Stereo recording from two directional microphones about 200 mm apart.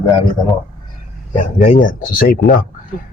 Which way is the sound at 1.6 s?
40° left (ahead or behind).